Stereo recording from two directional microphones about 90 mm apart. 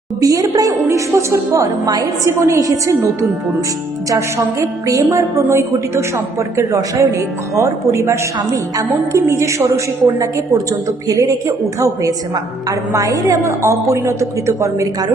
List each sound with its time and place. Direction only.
0.2 s a woman's voice: 40° right (ahead or behind)
5.1 s a woman's voice: 30° right (ahead or behind)